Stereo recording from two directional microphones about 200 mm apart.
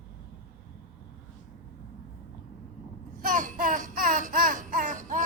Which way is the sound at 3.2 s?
40° right (ahead or behind).